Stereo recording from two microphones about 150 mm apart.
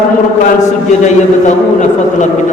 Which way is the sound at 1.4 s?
55° left (ahead or behind).